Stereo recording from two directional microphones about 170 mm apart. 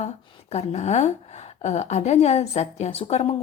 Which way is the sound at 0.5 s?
40° left (ahead or behind).